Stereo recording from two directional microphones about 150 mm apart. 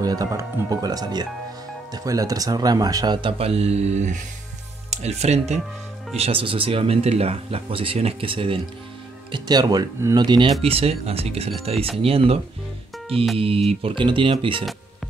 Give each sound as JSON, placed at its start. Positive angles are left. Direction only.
{"t": 0.0, "sound": "speech", "side_deg": -25}
{"t": 10.6, "sound": "speech", "side_deg": -40}